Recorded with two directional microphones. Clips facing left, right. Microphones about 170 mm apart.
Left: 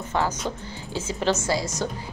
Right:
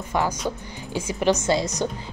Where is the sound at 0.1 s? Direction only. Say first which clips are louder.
Right 2 dB; 10° right (ahead or behind).